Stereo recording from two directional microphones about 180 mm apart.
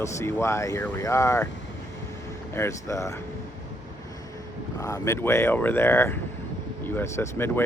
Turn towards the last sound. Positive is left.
turn(degrees=10)  # may be behind; listen again after turning